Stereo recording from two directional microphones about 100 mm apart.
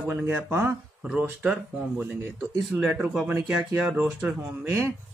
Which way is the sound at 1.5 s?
10° right (ahead or behind).